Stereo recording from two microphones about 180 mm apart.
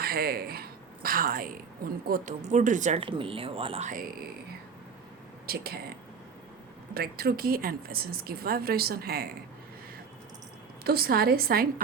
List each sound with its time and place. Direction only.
0.0 s a woman's voice: 55° right (ahead or behind)
3.0 s speech: 30° right (ahead or behind); by 4.3 s 45° right (ahead or behind)
5.5 s speech: 60° right (ahead or behind)
6.9 s speech: 60° right (ahead or behind)
10.8 s speech: 60° right (ahead or behind)